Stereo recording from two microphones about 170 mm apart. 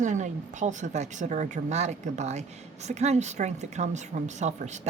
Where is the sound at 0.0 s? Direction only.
45° right (ahead or behind).